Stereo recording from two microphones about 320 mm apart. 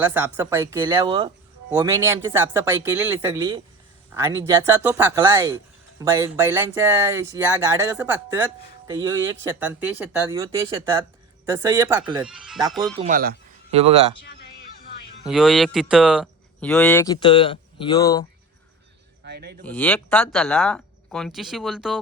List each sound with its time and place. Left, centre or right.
0.0 s speech: centre
13.0 s speech: right
15.3 s speech: centre
19.2 s speech: right
19.6 s speech: centre